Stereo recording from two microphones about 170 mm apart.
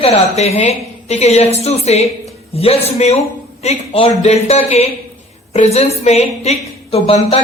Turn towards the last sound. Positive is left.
turn(degrees=35)  # may be behind; listen again after turning